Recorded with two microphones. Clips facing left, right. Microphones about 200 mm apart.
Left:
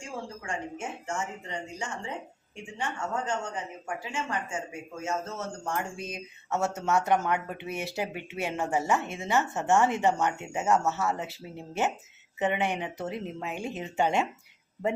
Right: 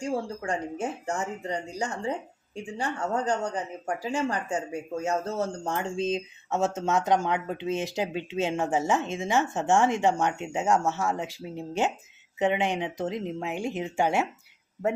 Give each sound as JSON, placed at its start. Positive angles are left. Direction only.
{"t": 0.0, "sound": "speech", "side_deg": -35}